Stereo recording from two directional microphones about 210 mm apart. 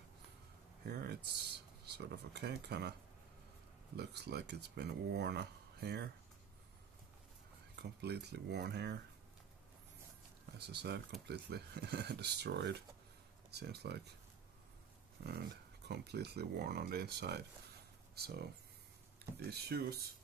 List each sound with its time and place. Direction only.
0.8 s speech: 50° right (ahead or behind)
3.9 s speech: 50° right (ahead or behind)
7.8 s speech: 50° right (ahead or behind)
10.7 s speech: 50° right (ahead or behind)
15.9 s speech: 50° right (ahead or behind)
19.5 s speech: 50° right (ahead or behind)